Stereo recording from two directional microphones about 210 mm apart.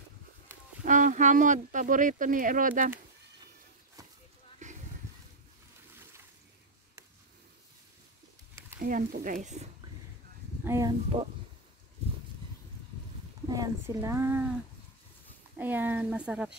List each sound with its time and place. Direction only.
0.8 s speech: 40° right (ahead or behind)
4.6 s a sound: 35° right (ahead or behind)
8.8 s speech: 40° right (ahead or behind)
10.6 s speech: 15° right (ahead or behind)
13.5 s speech: 15° right (ahead or behind)
15.5 s speech: 10° right (ahead or behind)